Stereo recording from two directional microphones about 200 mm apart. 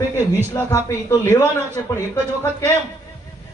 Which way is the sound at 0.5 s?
15° left (ahead or behind).